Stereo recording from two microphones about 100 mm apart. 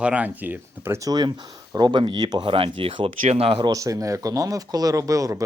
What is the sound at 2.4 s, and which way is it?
Speech, 65° right (ahead or behind).